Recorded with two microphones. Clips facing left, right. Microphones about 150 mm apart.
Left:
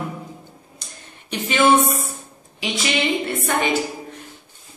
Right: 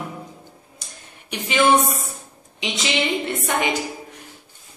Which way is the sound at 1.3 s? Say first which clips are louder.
Left 3 dB; 10° right (ahead or behind).